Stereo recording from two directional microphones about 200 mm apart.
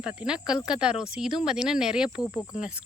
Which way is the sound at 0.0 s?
5° right (ahead or behind).